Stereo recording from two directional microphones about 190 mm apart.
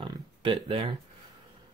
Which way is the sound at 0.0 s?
25° right (ahead or behind).